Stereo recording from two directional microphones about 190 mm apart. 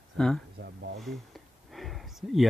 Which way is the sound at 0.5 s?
60° right (ahead or behind).